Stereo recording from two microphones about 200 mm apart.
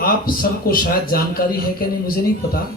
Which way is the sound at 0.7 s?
45° left (ahead or behind).